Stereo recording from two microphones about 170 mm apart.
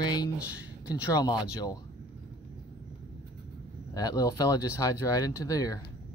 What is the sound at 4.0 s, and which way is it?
Speech, 20° left (ahead or behind).